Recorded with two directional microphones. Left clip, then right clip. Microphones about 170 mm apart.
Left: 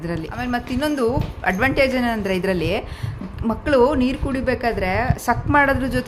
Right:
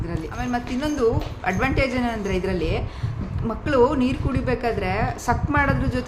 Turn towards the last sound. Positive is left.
turn(degrees=35)  # may be behind; listen again after turning